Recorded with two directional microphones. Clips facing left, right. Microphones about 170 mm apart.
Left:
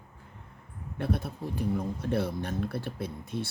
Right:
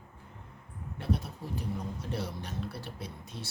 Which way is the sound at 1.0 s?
55° left (ahead or behind).